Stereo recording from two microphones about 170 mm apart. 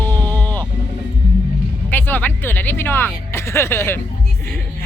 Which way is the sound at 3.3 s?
15° left (ahead or behind).